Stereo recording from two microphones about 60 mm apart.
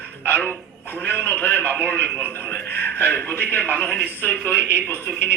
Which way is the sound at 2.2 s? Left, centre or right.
Right.